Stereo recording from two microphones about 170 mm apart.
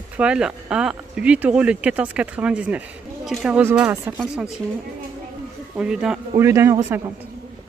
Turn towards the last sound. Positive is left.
turn(degrees=-15)  # may be behind; listen again after turning